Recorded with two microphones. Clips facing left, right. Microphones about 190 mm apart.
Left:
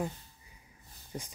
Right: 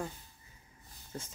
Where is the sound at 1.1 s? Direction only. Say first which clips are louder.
Left 2 dB; 15° left (ahead or behind).